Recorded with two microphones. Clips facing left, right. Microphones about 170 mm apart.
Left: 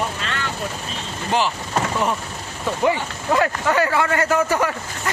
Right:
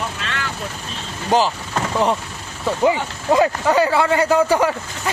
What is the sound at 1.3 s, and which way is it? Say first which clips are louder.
Speech: right 4 dB; 40° right (ahead or behind).